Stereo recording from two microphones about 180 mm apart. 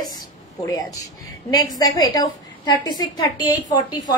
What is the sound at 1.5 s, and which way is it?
A woman's voice, 20° left (ahead or behind).